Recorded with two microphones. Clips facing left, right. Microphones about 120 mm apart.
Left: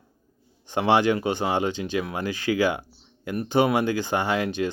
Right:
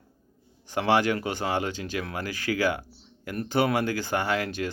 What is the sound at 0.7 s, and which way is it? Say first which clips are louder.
Speech: left 3 dB; 20° left (ahead or behind).